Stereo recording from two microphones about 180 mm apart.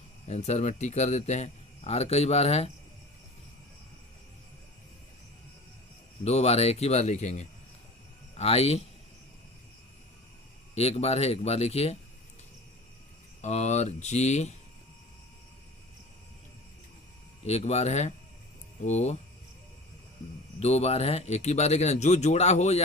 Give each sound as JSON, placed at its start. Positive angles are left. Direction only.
{"t": 0.3, "sound": "a man's voice", "side_deg": 40}
{"t": 6.2, "sound": "a man's voice", "side_deg": 35}
{"t": 10.8, "sound": "a man's voice", "side_deg": 35}
{"t": 13.4, "sound": "a man's voice", "side_deg": 40}
{"t": 17.4, "sound": "a man's voice", "side_deg": 35}
{"t": 20.6, "sound": "a man's voice", "side_deg": 35}